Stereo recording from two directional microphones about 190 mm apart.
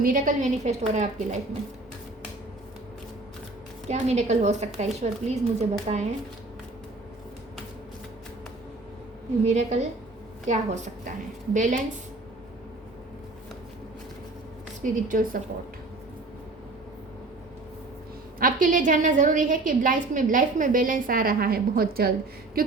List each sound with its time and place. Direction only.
0.0 s speech: 45° right (ahead or behind)
3.8 s speech: 35° right (ahead or behind)
9.4 s speech: 35° right (ahead or behind)
14.8 s a woman's voice: 45° right (ahead or behind)
18.3 s a woman's voice: 45° right (ahead or behind)